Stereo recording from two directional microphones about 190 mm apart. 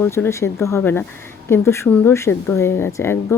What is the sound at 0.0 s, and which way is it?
A woman's voice, 10° left (ahead or behind).